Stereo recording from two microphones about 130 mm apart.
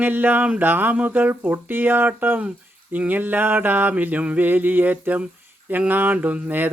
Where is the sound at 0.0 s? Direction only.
15° right (ahead or behind).